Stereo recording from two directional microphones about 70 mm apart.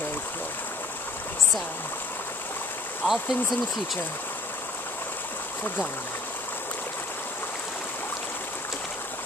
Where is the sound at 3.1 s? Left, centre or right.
Centre.